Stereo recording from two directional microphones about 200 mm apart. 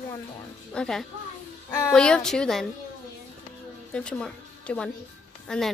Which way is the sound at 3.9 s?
5° left (ahead or behind).